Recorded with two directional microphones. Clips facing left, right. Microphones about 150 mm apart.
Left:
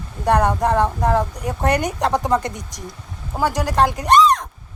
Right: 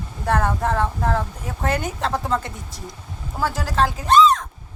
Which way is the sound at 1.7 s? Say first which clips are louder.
Left 4 dB; 75° left (ahead or behind).